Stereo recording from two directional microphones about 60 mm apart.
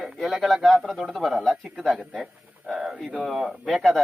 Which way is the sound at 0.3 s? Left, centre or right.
Centre.